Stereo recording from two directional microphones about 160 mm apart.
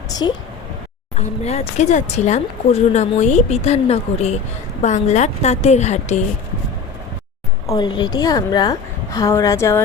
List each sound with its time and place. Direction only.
0.1 s a woman's voice: 25° left (ahead or behind)
1.1 s speech: 45° left (ahead or behind)
7.7 s a woman's voice: 30° left (ahead or behind)